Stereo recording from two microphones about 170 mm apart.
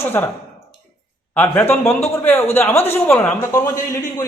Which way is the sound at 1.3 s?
15° left (ahead or behind).